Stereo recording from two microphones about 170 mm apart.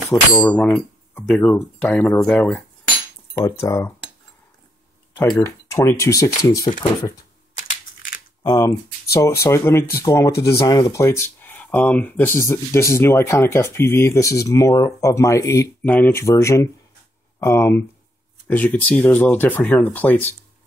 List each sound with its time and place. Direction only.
0.1 s speech: 10° left (ahead or behind)
3.3 s speech: 20° left (ahead or behind)
5.1 s speech: 15° left (ahead or behind)
7.5 s computer keyboard: 50° left (ahead or behind)
8.5 s speech: 20° left (ahead or behind)